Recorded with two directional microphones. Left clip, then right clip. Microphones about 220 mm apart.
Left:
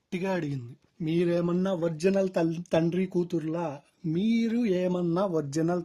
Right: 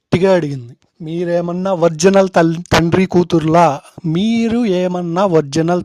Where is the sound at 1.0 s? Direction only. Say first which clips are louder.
Right 9 dB; 30° right (ahead or behind).